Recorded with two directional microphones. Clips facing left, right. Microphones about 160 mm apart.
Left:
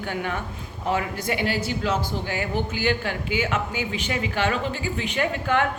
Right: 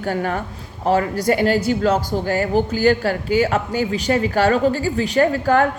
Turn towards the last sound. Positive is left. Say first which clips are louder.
# right 8 dB
turn(degrees=-40)  # may be behind; listen again after turning